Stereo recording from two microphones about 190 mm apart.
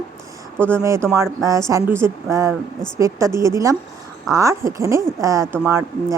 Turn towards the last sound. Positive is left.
turn(degrees=-15)  # may be behind; listen again after turning